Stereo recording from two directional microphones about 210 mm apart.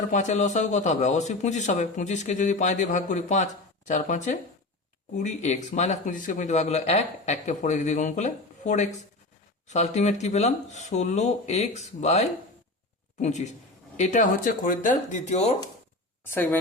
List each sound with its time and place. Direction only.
0.1 s a man's voice: 35° left (ahead or behind)
16.2 s speech: 10° left (ahead or behind)